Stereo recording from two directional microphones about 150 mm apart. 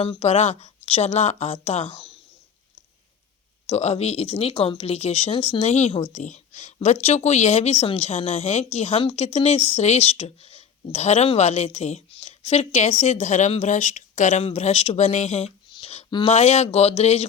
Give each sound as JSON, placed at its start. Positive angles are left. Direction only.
{"t": 0.0, "sound": "speech", "side_deg": 45}
{"t": 3.7, "sound": "speech", "side_deg": 45}
{"t": 15.7, "sound": "a sound", "side_deg": 40}
{"t": 16.0, "sound": "speech", "side_deg": 30}
{"t": 16.3, "sound": "speech", "side_deg": 50}